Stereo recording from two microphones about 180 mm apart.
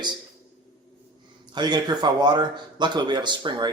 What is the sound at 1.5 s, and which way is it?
Speech, 25° right (ahead or behind).